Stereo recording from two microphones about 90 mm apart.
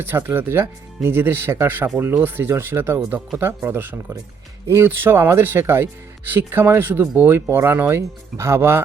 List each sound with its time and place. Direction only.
0.0 s speech: 25° right (ahead or behind)